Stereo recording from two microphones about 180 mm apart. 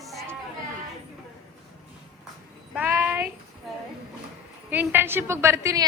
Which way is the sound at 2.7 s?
10° right (ahead or behind).